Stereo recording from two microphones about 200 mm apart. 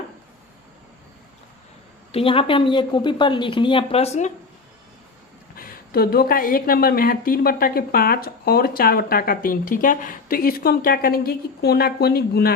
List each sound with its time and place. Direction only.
2.1 s speech: 30° left (ahead or behind)
5.5 s a woman's voice: 50° left (ahead or behind)